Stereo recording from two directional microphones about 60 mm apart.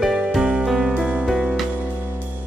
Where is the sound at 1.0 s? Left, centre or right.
Centre.